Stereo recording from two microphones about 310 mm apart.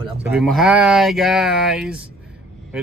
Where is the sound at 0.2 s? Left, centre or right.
Centre.